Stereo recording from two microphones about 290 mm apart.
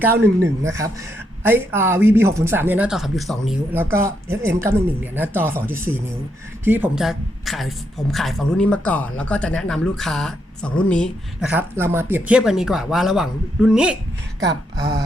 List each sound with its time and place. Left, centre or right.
0.6 s speech: centre
14.4 s speech: right